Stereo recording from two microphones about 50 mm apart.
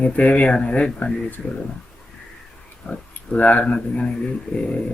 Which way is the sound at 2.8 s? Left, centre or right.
Centre.